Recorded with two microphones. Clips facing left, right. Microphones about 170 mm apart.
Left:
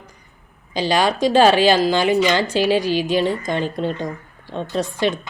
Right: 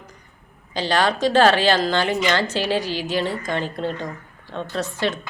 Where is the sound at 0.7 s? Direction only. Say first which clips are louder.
Left 2 dB; 10° left (ahead or behind).